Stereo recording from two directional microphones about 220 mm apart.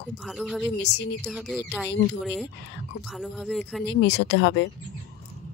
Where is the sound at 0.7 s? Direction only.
50° left (ahead or behind).